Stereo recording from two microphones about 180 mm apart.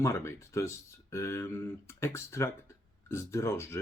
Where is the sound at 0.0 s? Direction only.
15° left (ahead or behind).